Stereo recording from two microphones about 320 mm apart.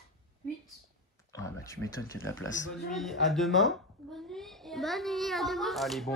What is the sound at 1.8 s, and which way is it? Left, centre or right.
Speech, left.